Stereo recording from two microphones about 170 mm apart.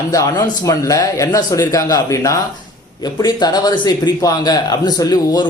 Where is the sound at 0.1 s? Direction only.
20° left (ahead or behind).